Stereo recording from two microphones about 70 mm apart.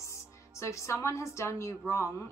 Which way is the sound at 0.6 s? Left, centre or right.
Left.